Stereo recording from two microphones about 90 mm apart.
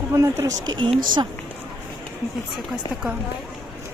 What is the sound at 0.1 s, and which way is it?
Speech, 30° right (ahead or behind).